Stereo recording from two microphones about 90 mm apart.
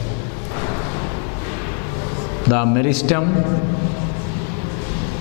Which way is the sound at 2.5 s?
15° left (ahead or behind).